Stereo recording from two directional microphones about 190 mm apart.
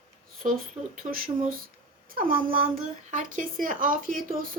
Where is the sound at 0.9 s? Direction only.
50° right (ahead or behind).